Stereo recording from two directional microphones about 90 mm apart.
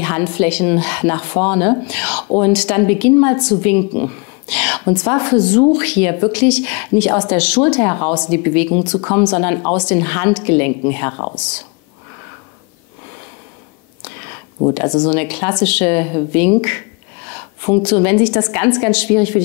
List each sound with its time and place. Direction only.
0.0 s a woman's voice: 15° left (ahead or behind)
15.0 s a woman's voice: 15° left (ahead or behind)